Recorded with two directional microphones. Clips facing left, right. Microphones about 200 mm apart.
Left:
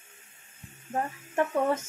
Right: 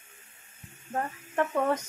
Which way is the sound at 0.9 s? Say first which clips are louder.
Left 1 dB; 20° left (ahead or behind).